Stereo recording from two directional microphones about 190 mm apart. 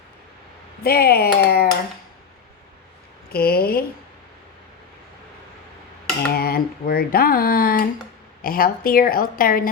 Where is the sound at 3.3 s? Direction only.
55° left (ahead or behind).